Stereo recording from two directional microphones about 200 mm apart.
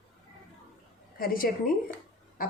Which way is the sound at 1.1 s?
45° left (ahead or behind).